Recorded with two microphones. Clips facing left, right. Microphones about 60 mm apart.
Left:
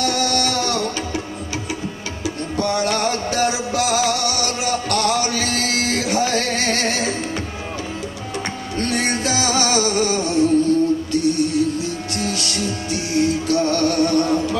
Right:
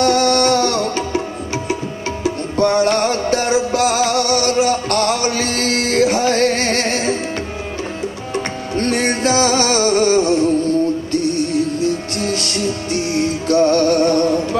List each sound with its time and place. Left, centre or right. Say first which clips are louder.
0.0 s music: right 7 dB; right
2.2 s music: right 6 dB; right
8.7 s music: right 4 dB; right
12.2 s music: right 3 dB; right